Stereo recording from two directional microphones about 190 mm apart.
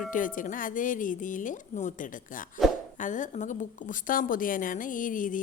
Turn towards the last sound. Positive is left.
turn(degrees=45)  # may be behind; listen again after turning